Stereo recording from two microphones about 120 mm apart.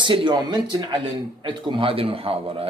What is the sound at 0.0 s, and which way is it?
A man's voice, 40° right (ahead or behind).